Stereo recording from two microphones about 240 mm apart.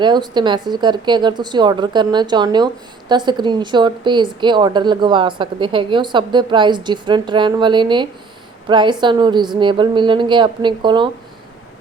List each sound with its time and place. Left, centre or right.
0.0 s a woman's voice: centre